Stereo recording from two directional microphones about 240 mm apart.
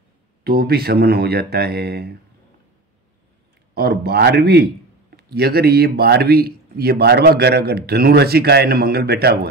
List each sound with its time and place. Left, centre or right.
0.4 s speech: right
3.7 s speech: right